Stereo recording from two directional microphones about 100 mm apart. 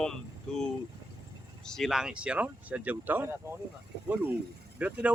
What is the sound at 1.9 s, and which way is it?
Speech, 5° right (ahead or behind).